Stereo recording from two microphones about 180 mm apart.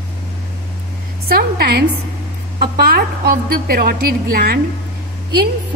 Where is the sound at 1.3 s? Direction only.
60° right (ahead or behind).